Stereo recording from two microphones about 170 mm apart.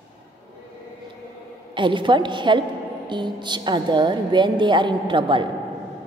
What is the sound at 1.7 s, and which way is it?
A woman's voice, 30° right (ahead or behind).